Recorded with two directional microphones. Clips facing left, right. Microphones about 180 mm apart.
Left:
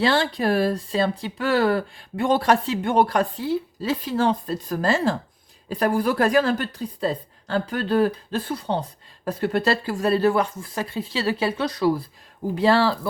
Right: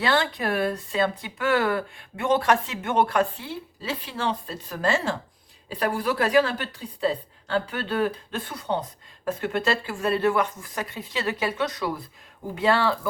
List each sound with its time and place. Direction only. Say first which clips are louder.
0.0 s speech: left 3 dB; 30° left (ahead or behind)